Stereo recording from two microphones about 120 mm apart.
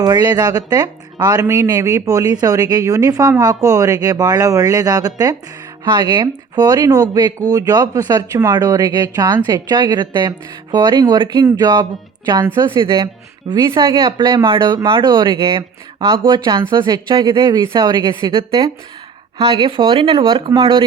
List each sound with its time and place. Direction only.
0.0 s speech: 35° right (ahead or behind)